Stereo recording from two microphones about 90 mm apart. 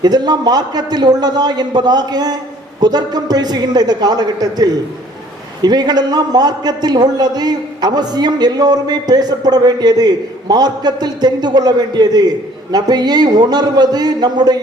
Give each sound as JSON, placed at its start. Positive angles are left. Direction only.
{"t": 0.0, "sound": "a man's voice", "side_deg": -50}